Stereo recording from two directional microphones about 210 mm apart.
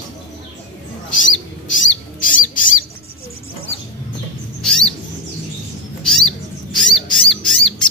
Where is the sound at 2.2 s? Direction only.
40° left (ahead or behind).